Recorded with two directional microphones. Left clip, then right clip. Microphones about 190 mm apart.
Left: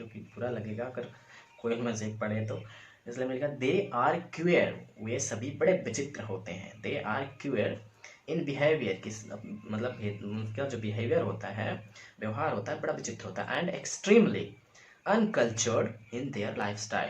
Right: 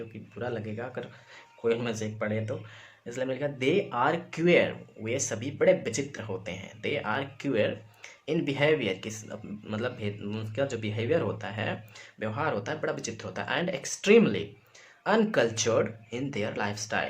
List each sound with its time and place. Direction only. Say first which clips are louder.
0.3 s speech: right 1 dB; 55° right (ahead or behind)